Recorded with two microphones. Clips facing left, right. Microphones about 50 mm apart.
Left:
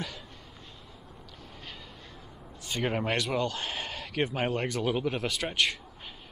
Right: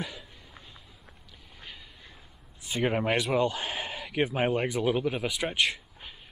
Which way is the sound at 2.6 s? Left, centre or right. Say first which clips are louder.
Right 3 dB; centre.